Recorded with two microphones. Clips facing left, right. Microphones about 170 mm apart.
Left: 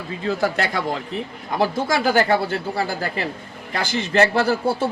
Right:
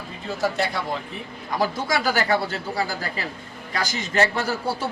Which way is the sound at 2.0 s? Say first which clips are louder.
Left 5 dB; 30° left (ahead or behind).